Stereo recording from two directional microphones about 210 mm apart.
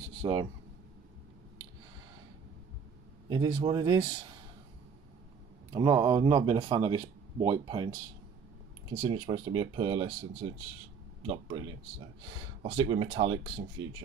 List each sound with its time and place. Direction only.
0.2 s speech: 25° right (ahead or behind)
3.3 s speech: 20° right (ahead or behind)
5.7 s speech: 20° right (ahead or behind)
9.0 s speech: 20° right (ahead or behind)
12.6 s speech: 35° right (ahead or behind)
12.9 s speech: 20° right (ahead or behind)